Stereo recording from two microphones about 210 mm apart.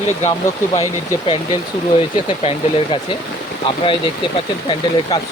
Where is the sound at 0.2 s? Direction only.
30° left (ahead or behind).